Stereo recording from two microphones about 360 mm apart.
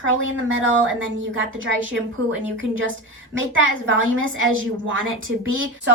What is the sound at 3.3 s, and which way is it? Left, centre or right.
Speech, right.